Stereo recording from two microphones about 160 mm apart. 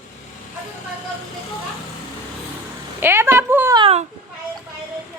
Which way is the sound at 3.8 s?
35° right (ahead or behind).